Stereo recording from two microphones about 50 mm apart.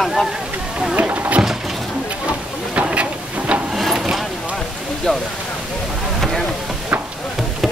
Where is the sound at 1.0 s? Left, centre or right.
Right.